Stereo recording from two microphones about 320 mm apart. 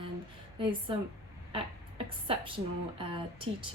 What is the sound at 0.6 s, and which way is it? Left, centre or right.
A woman's voice, centre.